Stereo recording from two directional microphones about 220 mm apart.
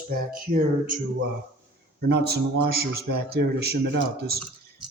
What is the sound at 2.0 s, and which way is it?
A man's voice, 50° right (ahead or behind).